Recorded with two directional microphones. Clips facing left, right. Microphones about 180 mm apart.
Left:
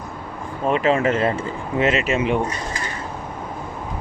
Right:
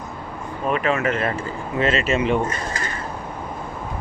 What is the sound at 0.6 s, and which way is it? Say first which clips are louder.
Speech: left 3 dB; 25° left (ahead or behind).